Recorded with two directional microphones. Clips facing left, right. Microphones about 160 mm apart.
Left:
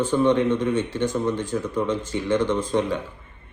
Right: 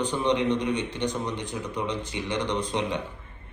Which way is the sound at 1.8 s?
45° left (ahead or behind).